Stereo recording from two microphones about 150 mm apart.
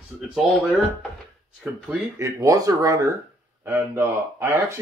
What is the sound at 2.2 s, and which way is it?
Speech, 20° right (ahead or behind).